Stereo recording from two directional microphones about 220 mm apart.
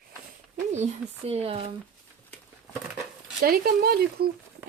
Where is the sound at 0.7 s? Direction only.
30° right (ahead or behind).